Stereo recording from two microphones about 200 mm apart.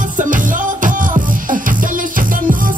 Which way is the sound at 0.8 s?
40° right (ahead or behind).